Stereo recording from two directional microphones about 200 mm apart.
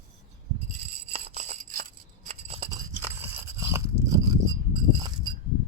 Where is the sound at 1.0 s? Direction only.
30° right (ahead or behind).